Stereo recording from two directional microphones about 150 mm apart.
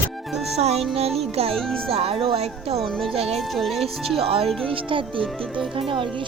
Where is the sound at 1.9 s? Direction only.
40° right (ahead or behind).